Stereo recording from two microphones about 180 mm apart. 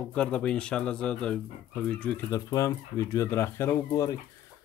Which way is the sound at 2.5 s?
20° left (ahead or behind).